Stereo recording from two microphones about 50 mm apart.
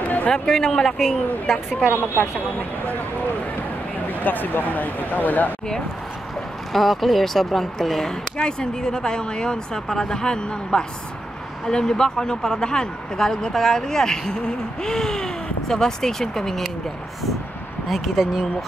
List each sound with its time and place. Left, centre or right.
0.0 s a sound: left
0.3 s speech: centre
4.1 s speech: left
6.7 s speech: centre
17.8 s speech: centre